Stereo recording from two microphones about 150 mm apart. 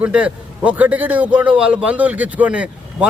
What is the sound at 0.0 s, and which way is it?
A man's voice, 10° right (ahead or behind).